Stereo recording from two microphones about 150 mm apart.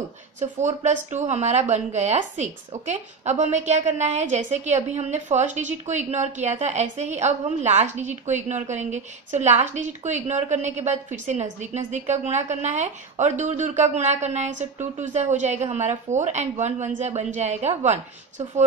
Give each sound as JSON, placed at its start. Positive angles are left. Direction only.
{"t": 0.4, "sound": "a woman's voice", "side_deg": -50}